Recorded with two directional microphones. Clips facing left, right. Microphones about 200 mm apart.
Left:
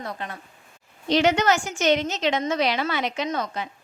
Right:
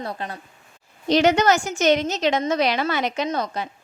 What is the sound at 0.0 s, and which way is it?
A woman's voice, 35° right (ahead or behind).